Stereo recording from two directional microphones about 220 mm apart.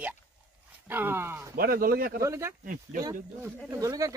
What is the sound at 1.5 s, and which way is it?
Speech, 40° right (ahead or behind).